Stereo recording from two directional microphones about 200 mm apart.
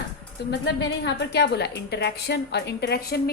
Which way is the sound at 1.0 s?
60° left (ahead or behind).